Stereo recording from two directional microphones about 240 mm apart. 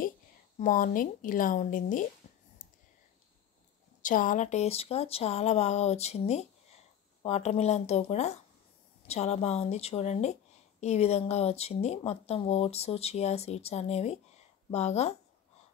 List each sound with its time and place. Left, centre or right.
0.6 s a woman's voice: left
4.0 s speech: left